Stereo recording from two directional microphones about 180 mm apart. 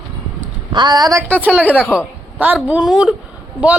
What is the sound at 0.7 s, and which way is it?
Speech, 25° right (ahead or behind).